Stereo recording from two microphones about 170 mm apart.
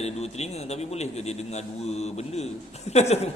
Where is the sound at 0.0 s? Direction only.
40° left (ahead or behind).